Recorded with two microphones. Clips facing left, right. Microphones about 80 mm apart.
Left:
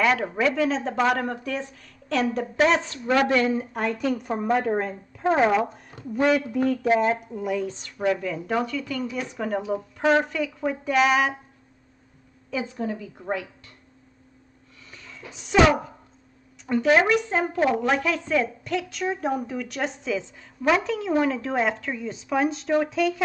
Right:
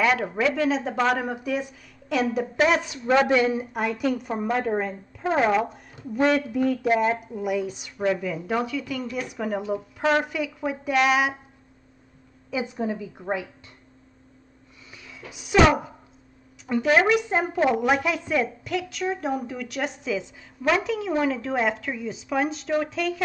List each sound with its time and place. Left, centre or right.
0.0 s a woman's voice: centre
12.4 s a woman's voice: centre
14.9 s a woman's voice: centre